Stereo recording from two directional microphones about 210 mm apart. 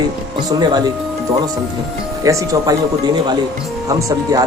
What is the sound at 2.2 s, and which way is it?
Speech, 15° right (ahead or behind).